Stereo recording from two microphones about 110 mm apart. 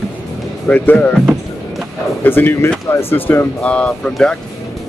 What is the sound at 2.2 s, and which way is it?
Speech, 20° left (ahead or behind).